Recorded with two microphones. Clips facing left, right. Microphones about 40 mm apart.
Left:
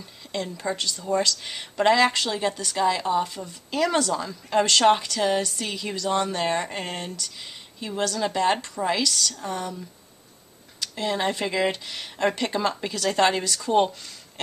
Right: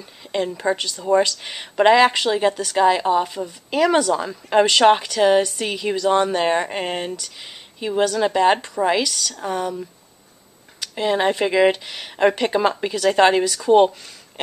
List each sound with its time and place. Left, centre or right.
0.0 s a woman's voice: right
9.0 s speech: centre
10.8 s speech: right